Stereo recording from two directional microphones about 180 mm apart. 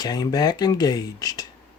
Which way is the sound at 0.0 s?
20° left (ahead or behind).